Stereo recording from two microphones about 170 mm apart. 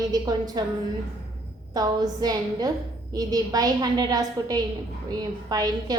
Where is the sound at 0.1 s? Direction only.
25° right (ahead or behind).